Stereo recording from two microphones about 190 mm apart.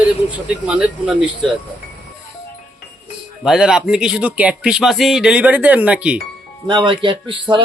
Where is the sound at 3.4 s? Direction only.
5° right (ahead or behind).